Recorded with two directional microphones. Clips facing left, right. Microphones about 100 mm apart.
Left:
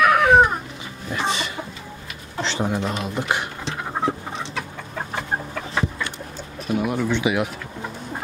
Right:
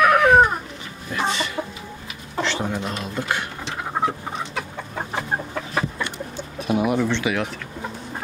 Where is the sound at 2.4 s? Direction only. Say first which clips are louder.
Right 1 dB; 25° left (ahead or behind).